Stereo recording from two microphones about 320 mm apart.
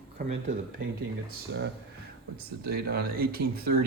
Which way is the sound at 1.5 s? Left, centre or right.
Right.